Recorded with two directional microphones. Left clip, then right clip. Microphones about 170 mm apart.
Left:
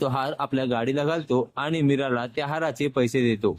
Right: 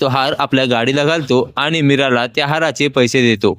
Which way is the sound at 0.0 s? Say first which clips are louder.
Right 11 dB; 30° right (ahead or behind).